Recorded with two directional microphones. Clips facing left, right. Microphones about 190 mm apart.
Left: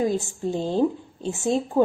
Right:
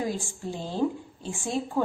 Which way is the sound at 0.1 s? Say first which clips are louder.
Left 7 dB; 25° left (ahead or behind).